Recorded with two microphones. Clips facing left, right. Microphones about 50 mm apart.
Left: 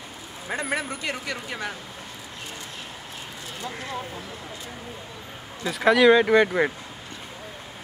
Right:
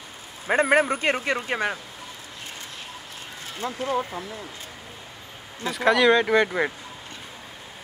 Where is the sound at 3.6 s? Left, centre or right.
Right.